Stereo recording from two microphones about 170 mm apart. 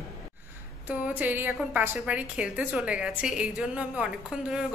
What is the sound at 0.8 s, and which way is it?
A woman's voice, 10° right (ahead or behind).